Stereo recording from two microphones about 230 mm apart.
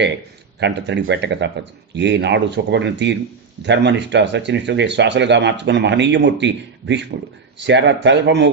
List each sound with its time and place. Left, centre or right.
0.6 s speech: right